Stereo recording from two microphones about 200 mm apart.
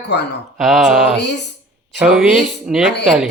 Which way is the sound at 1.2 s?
60° left (ahead or behind).